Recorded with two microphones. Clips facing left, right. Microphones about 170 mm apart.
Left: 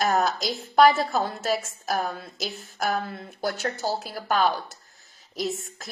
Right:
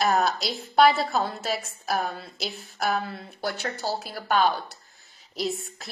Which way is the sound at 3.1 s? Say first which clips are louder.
Left 2 dB; 50° left (ahead or behind).